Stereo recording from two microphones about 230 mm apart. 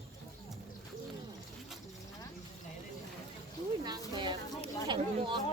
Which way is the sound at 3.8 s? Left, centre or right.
Centre.